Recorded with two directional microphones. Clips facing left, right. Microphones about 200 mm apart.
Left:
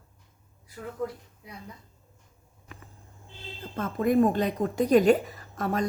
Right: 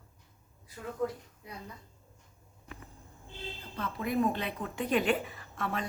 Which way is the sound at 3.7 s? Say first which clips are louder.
Left 8 dB; 45° left (ahead or behind).